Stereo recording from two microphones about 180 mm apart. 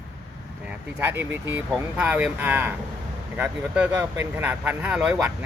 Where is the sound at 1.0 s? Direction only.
10° right (ahead or behind).